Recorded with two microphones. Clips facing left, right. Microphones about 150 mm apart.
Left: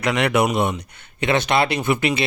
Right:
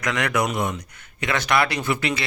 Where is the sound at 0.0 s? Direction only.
30° left (ahead or behind).